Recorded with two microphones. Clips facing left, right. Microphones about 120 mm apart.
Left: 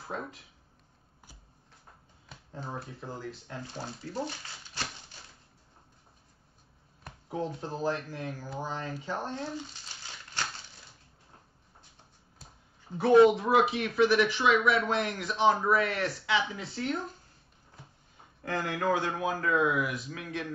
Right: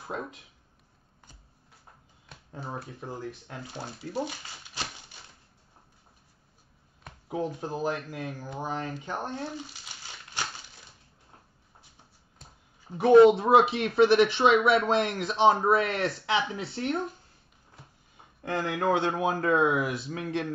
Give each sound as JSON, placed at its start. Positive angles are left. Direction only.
{"t": 0.0, "sound": "speech", "side_deg": -20}
{"t": 2.5, "sound": "speech", "side_deg": -15}
{"t": 7.2, "sound": "speech", "side_deg": -15}
{"t": 10.3, "sound": "crumpling", "side_deg": -15}
{"t": 12.9, "sound": "a man's voice", "side_deg": -20}
{"t": 18.4, "sound": "a man's voice", "side_deg": -20}